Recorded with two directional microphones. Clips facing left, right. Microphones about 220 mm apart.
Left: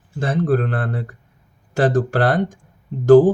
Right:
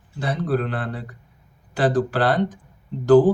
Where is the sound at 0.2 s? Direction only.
45° left (ahead or behind).